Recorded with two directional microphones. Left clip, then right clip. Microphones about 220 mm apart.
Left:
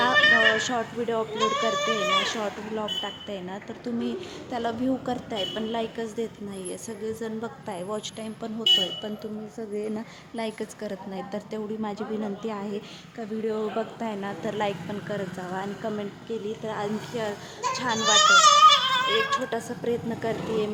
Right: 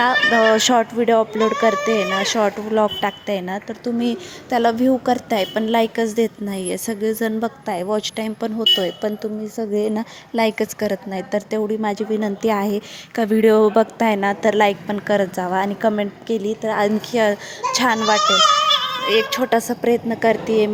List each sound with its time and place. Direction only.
0.3 s a child's voice: 35° right (ahead or behind)